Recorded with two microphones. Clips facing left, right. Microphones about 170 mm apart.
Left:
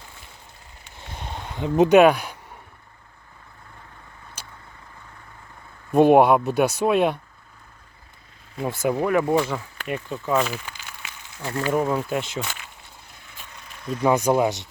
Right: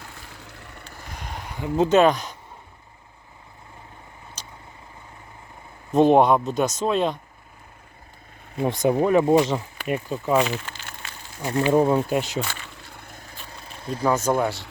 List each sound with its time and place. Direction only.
0.3 s vehicle: 85° right; by 0.9 s 65° right (ahead or behind)
1.0 s a sound: 25° left (ahead or behind); by 2.3 s 10° left (ahead or behind)
4.4 s vehicle: 10° left (ahead or behind)
5.9 s speech: 10° left (ahead or behind)
8.8 s speech: 25° right (ahead or behind)
12.9 s a sound: 55° right (ahead or behind); by 14.0 s 30° right (ahead or behind)
14.0 s speech: 15° left (ahead or behind)